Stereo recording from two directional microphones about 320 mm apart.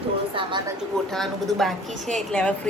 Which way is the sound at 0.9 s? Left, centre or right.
Centre.